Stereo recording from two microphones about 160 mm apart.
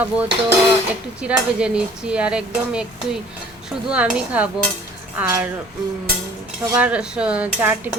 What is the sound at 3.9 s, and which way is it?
Speech, 10° right (ahead or behind).